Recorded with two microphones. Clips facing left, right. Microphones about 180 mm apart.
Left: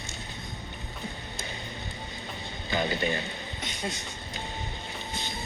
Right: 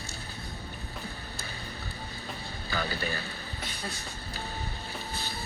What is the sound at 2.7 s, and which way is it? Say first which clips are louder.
Vehicle: left 5 dB; 20° left (ahead or behind).